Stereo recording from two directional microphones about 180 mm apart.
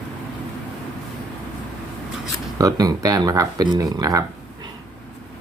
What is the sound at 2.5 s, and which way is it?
Speech, 20° right (ahead or behind).